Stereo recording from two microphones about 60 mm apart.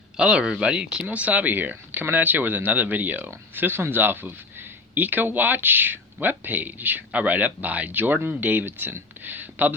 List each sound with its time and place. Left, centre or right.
0.2 s speech: centre; by 9.7 s right